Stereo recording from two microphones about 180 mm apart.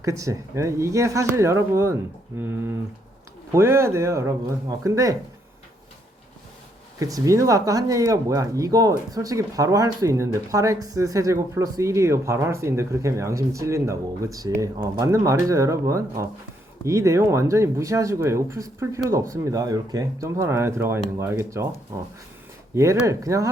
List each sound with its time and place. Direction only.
0.0 s speech: 15° right (ahead or behind)
7.0 s speech: 20° right (ahead or behind)